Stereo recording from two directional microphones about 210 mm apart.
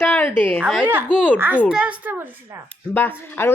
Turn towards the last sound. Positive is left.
turn(degrees=10)  # may be behind; listen again after turning